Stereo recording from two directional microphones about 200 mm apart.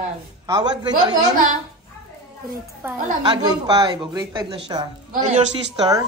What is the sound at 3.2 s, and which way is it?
Speech, 20° right (ahead or behind).